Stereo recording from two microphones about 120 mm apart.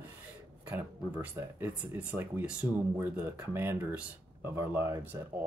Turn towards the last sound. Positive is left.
turn(degrees=-20)  # may be behind; listen again after turning